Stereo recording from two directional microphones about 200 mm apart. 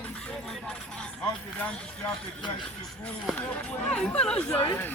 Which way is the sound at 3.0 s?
5° left (ahead or behind).